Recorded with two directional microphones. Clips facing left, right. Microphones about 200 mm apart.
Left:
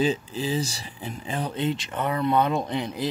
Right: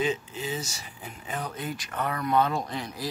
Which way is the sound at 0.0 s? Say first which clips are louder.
Left 4 dB; 35° left (ahead or behind).